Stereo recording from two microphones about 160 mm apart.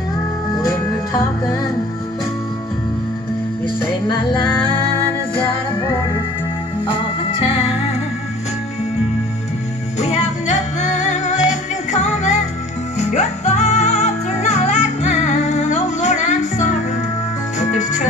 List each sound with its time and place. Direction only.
0.6 s music: 25° left (ahead or behind)
7.4 s music: 35° left (ahead or behind)
9.9 s music: 45° left (ahead or behind)